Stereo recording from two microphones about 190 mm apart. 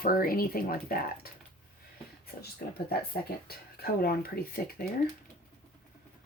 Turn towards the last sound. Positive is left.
turn(degrees=55)  # may be behind; listen again after turning